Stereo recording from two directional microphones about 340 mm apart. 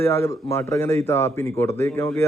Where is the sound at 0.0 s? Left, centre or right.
Centre.